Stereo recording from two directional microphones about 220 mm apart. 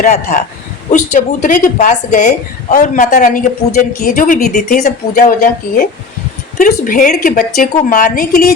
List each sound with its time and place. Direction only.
0.0 s speech: 35° left (ahead or behind)